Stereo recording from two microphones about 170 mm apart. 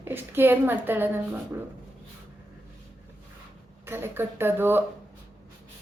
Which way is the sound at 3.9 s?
15° right (ahead or behind).